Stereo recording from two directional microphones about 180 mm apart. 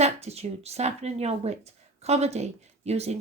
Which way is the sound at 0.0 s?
35° right (ahead or behind).